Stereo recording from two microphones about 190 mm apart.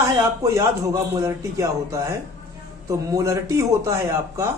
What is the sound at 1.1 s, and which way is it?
A man's voice, 15° right (ahead or behind).